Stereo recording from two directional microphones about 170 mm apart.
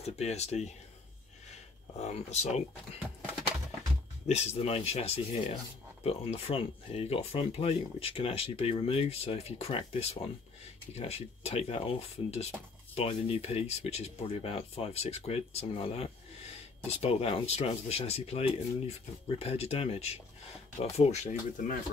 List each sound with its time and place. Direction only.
0.0 s speech: 40° left (ahead or behind)
2.0 s speech: 40° left (ahead or behind)
4.3 s speech: 40° left (ahead or behind)